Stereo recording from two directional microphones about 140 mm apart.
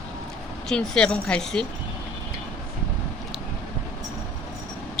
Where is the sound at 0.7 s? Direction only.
5° left (ahead or behind).